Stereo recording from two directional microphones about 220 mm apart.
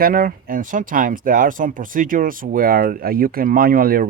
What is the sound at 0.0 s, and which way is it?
Speech, 40° right (ahead or behind).